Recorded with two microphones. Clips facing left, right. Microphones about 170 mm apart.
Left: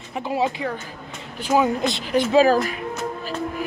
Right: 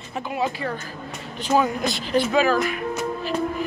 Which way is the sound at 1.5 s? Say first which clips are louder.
Left 1 dB; 15° left (ahead or behind).